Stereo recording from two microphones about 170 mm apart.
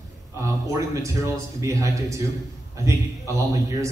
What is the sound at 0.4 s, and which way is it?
A man's voice, 20° right (ahead or behind).